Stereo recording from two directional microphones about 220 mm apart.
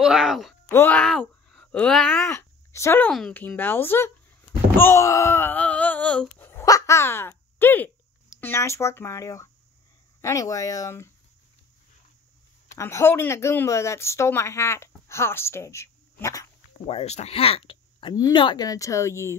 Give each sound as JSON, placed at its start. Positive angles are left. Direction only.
{"t": 0.0, "sound": "speech", "side_deg": 0}
{"t": 12.7, "sound": "speech", "side_deg": 10}
{"t": 16.7, "sound": "speech", "side_deg": 25}